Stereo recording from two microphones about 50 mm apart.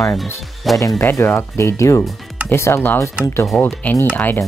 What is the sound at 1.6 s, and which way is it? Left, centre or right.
Speech, left.